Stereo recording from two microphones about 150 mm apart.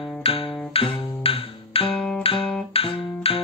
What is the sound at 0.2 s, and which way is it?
Music, 40° left (ahead or behind).